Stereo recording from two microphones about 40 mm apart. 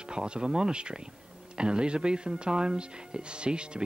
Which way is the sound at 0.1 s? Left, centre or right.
Right.